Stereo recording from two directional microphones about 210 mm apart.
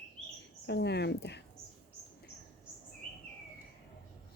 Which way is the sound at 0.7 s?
55° left (ahead or behind).